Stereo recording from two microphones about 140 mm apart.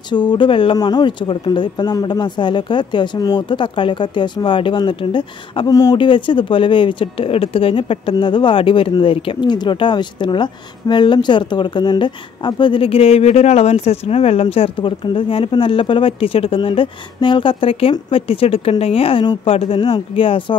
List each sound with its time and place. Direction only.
0.1 s speech: 35° left (ahead or behind)
5.9 s speech: 35° left (ahead or behind)